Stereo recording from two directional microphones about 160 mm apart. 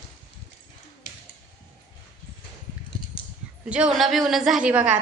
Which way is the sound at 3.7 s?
5° right (ahead or behind).